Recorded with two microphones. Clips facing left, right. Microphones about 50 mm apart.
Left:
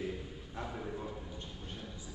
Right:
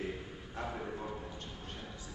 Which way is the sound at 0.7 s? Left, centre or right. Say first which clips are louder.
Right 1 dB; right.